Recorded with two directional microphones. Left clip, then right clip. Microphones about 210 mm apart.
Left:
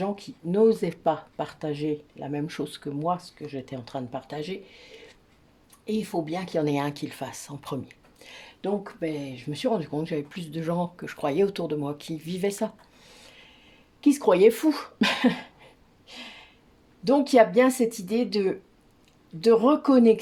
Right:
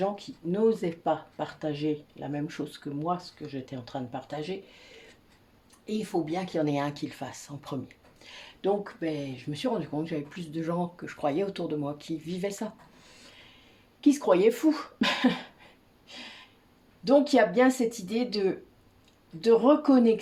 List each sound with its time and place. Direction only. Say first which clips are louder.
0.0 s speech: right 1 dB; 40° left (ahead or behind)
14.0 s speech: left 4 dB; 40° left (ahead or behind)
17.0 s speech: left 3 dB; 40° left (ahead or behind)